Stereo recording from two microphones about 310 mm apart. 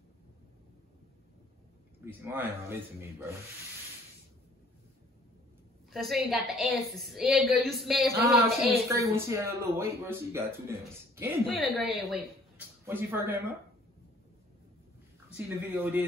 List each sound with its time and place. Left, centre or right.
2.0 s a man's voice: centre
5.9 s a man's voice: centre
15.2 s speech: centre